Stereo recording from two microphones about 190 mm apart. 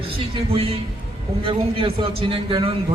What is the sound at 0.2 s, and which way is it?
Speech, 30° right (ahead or behind).